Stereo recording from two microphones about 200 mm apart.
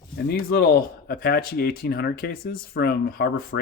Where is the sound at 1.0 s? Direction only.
50° left (ahead or behind).